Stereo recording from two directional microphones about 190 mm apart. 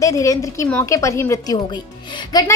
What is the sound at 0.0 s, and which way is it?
A woman's voice, 15° left (ahead or behind).